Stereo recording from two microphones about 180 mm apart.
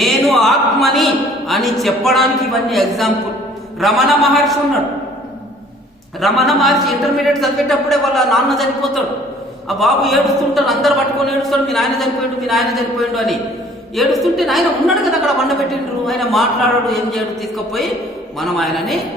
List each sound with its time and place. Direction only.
0.0 s a man's voice: centre (ahead or behind)
6.1 s a man's voice: centre (ahead or behind)